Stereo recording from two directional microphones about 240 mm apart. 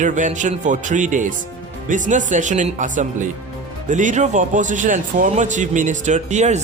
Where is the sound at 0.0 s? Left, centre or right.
Right.